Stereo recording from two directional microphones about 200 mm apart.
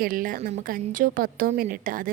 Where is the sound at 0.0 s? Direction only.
45° right (ahead or behind).